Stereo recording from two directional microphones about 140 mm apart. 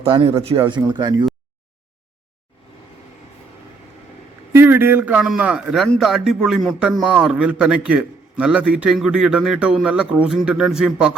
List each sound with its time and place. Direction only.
0.0 s speech: 40° right (ahead or behind)
4.5 s a man's voice: 15° right (ahead or behind)